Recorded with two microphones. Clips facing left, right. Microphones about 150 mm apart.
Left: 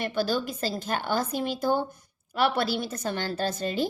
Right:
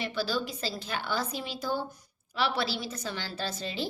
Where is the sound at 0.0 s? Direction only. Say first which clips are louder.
Left 4 dB; 50° left (ahead or behind).